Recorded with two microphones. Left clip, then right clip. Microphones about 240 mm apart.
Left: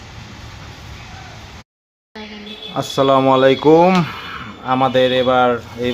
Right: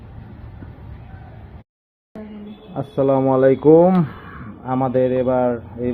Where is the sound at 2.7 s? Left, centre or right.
Left.